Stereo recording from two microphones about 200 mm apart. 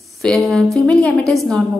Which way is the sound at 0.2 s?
Centre (ahead or behind).